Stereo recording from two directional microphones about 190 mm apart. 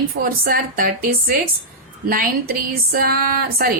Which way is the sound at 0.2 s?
45° right (ahead or behind).